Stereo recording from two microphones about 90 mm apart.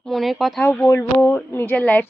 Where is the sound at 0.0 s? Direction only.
Centre (ahead or behind).